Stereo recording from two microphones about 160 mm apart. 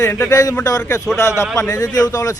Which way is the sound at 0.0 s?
20° left (ahead or behind).